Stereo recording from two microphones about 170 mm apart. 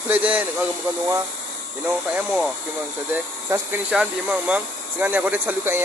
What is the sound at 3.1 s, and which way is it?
Speech, 15° right (ahead or behind).